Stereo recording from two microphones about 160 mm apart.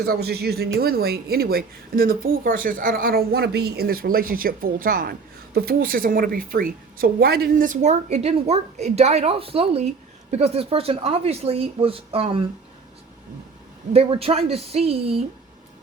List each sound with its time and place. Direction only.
0.0 s a woman's voice: 80° right; by 12.5 s 35° right (ahead or behind)
13.9 s speech: 40° right (ahead or behind)